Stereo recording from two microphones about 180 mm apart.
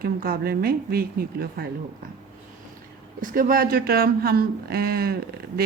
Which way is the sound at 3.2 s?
50° right (ahead or behind).